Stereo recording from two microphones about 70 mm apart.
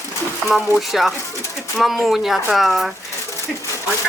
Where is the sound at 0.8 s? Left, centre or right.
Centre.